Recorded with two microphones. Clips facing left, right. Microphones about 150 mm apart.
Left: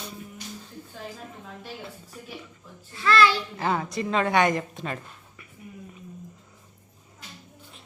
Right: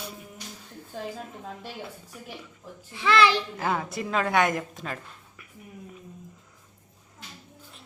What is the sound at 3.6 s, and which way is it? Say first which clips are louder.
A woman's voice: left 2 dB; centre (ahead or behind).